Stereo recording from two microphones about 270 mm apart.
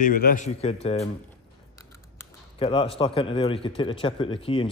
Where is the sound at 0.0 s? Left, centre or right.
Left.